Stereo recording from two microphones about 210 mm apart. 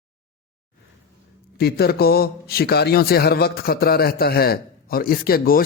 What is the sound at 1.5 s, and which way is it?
A man's voice, 50° left (ahead or behind).